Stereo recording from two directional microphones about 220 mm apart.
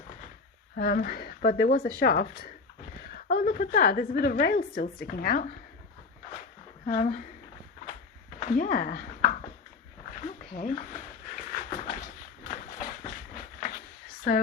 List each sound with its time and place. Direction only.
0.8 s a woman's voice: 40° left (ahead or behind)
6.8 s a woman's voice: 30° left (ahead or behind)
8.4 s speech: 35° left (ahead or behind)
10.2 s dog: 35° left (ahead or behind)
12.8 s a sound: 35° left (ahead or behind)
14.3 s a woman's voice: 40° left (ahead or behind)